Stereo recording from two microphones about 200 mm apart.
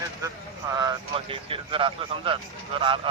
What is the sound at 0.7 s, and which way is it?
Speech, 20° right (ahead or behind).